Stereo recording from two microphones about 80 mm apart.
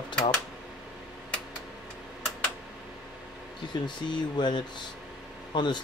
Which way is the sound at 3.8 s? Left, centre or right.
Left.